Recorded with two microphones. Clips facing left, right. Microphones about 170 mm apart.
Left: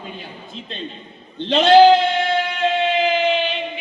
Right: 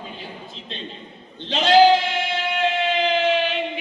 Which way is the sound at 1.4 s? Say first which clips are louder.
Left 7 dB; 60° left (ahead or behind).